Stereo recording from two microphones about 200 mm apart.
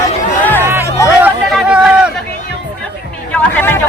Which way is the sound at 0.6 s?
10° right (ahead or behind).